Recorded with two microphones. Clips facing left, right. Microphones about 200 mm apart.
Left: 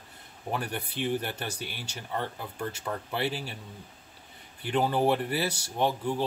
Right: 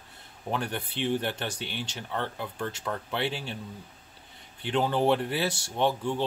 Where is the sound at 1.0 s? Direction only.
25° right (ahead or behind).